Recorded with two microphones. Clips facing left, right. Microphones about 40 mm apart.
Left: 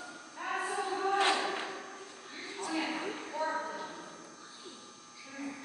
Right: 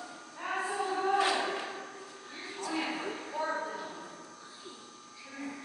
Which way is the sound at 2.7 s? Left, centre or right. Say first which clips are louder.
Even; centre.